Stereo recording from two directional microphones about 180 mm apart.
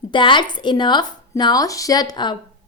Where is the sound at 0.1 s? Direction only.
25° left (ahead or behind).